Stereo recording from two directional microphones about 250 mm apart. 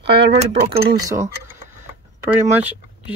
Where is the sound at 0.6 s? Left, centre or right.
Centre.